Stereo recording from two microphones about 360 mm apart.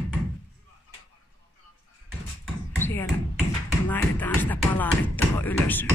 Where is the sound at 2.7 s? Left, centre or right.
Centre.